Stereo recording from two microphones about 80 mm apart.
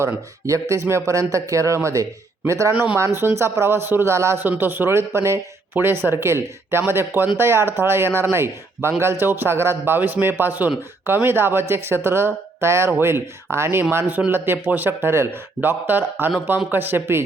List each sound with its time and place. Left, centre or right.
0.0 s speech: right
2.7 s speech: centre
3.0 s speech: right
4.4 s speech: right